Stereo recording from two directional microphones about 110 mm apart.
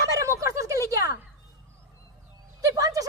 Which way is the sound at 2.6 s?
30° right (ahead or behind).